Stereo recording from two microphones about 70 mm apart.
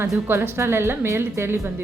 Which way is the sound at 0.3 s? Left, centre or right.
Right.